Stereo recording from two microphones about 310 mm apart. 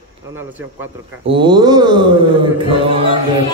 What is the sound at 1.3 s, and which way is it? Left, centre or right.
A man's voice, centre.